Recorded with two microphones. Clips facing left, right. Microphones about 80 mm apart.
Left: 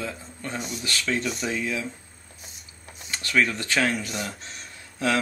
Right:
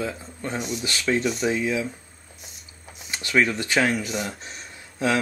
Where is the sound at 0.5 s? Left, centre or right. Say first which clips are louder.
Right 4 dB; centre.